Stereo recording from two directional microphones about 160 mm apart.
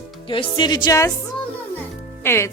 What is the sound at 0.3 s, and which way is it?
Speech, 30° left (ahead or behind).